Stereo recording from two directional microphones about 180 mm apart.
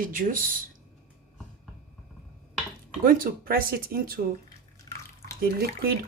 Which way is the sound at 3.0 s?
50° right (ahead or behind).